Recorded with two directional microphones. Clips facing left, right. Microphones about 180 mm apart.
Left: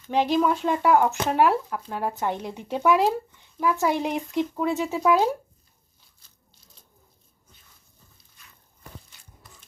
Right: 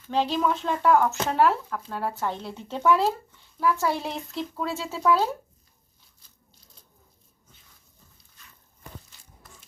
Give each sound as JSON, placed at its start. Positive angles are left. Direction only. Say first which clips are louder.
{"t": 0.1, "sound": "speech", "louder": "left 3 dB", "side_deg": 15}